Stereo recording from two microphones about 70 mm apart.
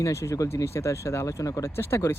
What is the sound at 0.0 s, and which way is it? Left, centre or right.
Speech, left.